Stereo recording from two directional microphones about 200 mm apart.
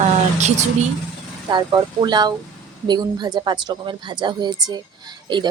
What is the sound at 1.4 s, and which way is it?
Speech, 20° right (ahead or behind).